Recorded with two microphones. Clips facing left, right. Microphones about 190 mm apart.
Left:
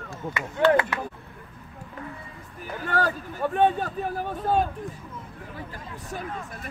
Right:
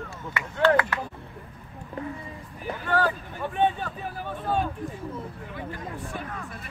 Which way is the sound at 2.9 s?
40° left (ahead or behind).